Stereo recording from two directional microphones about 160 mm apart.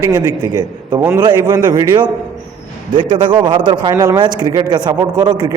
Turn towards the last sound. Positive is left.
turn(degrees=-25)  # may be behind; listen again after turning